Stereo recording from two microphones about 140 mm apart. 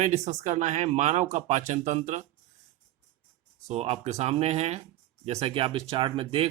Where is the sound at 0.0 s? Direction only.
55° right (ahead or behind).